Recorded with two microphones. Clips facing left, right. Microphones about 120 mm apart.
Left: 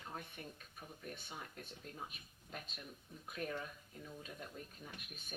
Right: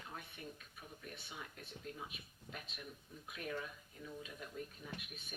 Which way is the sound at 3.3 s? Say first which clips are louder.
Left 2 dB; 40° left (ahead or behind).